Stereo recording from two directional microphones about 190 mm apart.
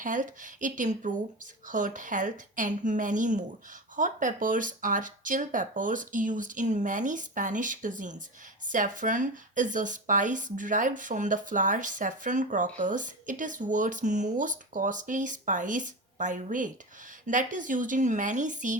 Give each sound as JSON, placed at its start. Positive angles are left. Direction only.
{"t": 0.0, "sound": "speech", "side_deg": -45}